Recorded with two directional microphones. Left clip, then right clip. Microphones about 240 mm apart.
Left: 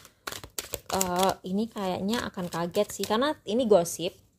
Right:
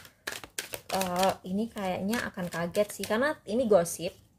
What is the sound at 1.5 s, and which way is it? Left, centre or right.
Speech, left.